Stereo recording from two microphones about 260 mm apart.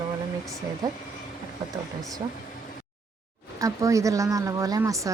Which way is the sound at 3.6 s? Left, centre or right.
Centre.